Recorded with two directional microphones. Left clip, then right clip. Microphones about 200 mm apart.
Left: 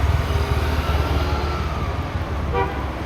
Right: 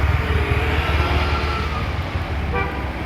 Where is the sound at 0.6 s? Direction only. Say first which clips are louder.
Right 3 dB; 65° left (ahead or behind).